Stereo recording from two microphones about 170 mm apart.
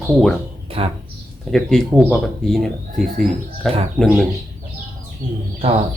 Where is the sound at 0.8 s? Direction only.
35° right (ahead or behind).